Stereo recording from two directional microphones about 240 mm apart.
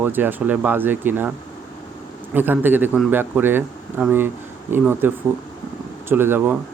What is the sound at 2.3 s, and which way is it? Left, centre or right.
A man's voice, centre.